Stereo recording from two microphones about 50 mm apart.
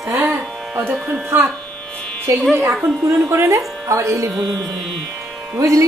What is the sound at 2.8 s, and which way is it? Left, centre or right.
Speech, right.